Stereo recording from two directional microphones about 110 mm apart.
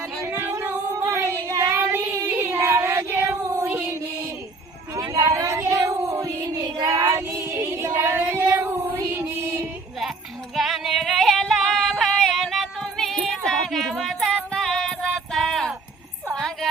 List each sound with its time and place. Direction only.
0.3 s music: 15° right (ahead or behind)
0.9 s female singing: 25° right (ahead or behind)
2.3 s a sound: 20° right (ahead or behind)
3.6 s music: 20° right (ahead or behind)
4.9 s child singing: 30° right (ahead or behind)
9.0 s music: 20° right (ahead or behind)
10.5 s singing: centre (ahead or behind)
16.3 s a sound: centre (ahead or behind)